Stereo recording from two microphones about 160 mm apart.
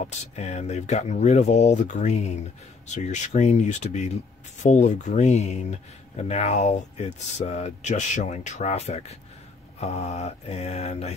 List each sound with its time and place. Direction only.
0.0 s speech: 45° left (ahead or behind)
9.8 s mantra: 40° left (ahead or behind)